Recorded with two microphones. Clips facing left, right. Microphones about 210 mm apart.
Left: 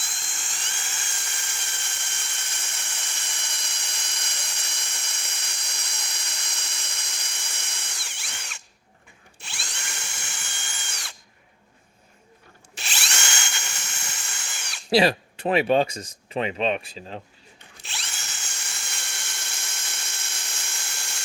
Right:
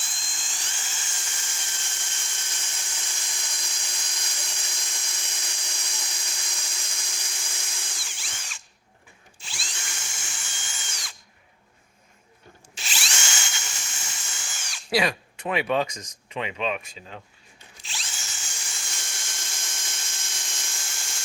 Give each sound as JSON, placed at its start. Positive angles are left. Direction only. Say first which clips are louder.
{"t": 0.0, "sound": "drill", "louder": "left 1 dB", "side_deg": 65}
{"t": 12.7, "sound": "drill", "louder": "left 1 dB", "side_deg": 60}
{"t": 14.8, "sound": "speech", "louder": "left 5 dB", "side_deg": 30}
{"t": 17.8, "sound": "drill", "louder": "left 1 dB", "side_deg": 65}